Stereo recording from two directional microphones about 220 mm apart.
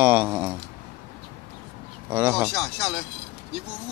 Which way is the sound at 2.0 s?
10° right (ahead or behind).